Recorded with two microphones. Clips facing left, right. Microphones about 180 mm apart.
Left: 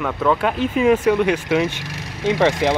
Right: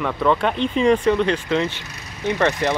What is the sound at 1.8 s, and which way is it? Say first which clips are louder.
Vehicle: left 4 dB; 90° left.